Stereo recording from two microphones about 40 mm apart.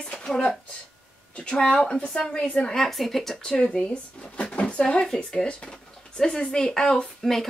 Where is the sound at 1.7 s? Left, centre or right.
Centre.